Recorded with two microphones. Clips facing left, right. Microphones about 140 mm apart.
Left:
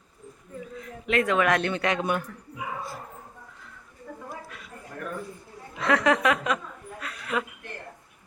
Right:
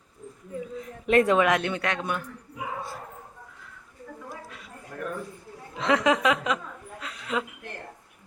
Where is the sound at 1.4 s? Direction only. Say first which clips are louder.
Right 1 dB; 15° right (ahead or behind).